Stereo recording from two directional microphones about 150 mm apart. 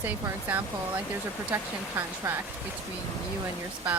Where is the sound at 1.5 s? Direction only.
15° right (ahead or behind).